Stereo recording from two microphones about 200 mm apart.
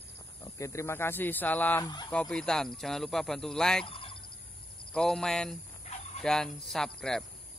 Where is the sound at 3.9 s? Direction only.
25° left (ahead or behind).